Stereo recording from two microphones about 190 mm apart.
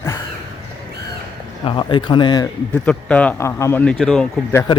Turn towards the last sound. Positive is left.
turn(degrees=10)  # may be behind; listen again after turning